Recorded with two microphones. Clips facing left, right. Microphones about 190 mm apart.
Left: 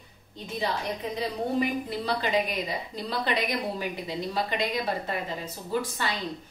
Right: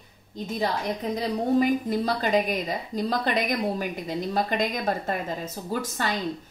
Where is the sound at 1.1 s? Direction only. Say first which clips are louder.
Right 5 dB; 45° right (ahead or behind).